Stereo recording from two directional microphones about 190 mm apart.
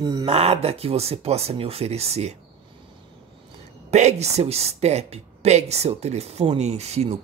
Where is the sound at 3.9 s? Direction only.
35° right (ahead or behind).